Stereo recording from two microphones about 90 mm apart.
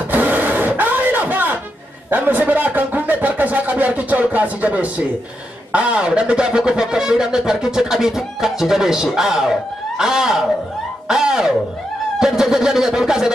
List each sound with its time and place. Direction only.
0.1 s music: 20° right (ahead or behind)
2.0 s a sound: 20° right (ahead or behind)
5.7 s speech: 10° right (ahead or behind)